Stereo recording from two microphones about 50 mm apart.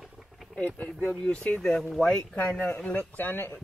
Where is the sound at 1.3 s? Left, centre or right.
Left.